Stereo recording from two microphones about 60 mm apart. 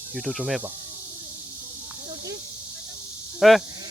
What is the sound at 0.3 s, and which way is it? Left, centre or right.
Speech, centre.